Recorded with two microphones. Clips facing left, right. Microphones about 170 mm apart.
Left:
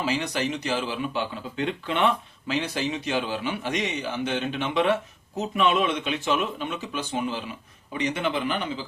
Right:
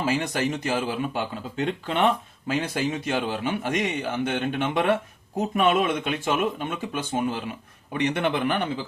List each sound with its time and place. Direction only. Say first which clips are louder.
0.0 s a man's voice: right 2 dB; 50° right (ahead or behind)